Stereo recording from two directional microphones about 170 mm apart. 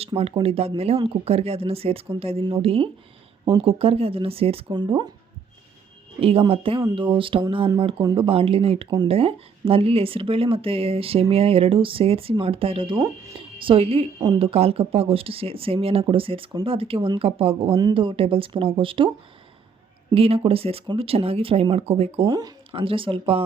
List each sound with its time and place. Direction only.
0.1 s speech: 30° right (ahead or behind)
6.1 s speech: 35° right (ahead or behind)
22.3 s speech: 20° right (ahead or behind)